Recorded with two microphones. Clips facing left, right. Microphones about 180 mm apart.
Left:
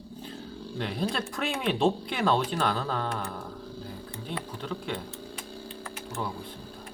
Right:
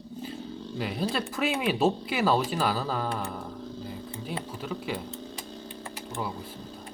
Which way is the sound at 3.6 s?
10° left (ahead or behind).